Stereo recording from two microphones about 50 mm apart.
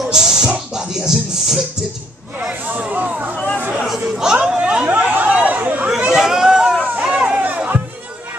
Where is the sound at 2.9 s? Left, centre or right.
Right.